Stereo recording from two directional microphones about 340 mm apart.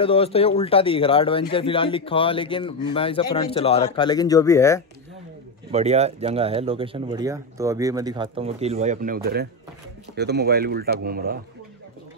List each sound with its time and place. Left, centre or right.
0.0 s speech: centre
5.7 s speech: centre